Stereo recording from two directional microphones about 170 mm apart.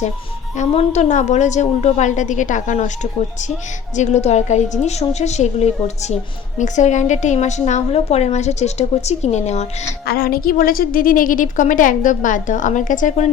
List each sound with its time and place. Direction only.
0.5 s a woman's voice: 40° left (ahead or behind)
10.1 s a woman's voice: 60° left (ahead or behind)